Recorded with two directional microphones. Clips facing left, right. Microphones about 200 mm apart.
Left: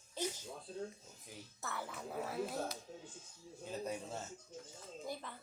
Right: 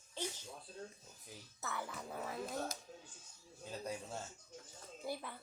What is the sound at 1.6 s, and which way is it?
Speech, centre (ahead or behind).